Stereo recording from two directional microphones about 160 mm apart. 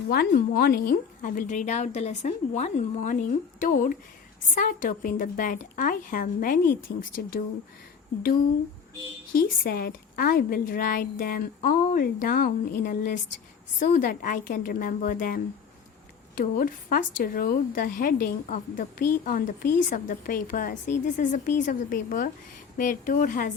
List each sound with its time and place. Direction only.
0.1 s a woman's voice: 80° left; by 7.4 s 65° left (ahead or behind)
9.3 s a woman's voice: 70° left (ahead or behind)